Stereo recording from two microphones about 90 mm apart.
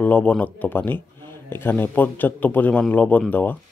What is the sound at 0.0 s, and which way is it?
Speech, 15° left (ahead or behind).